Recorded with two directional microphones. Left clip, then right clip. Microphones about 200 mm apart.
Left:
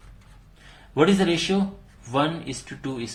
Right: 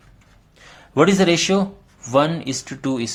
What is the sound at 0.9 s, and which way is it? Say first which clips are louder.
Speech: right 5 dB; 45° right (ahead or behind).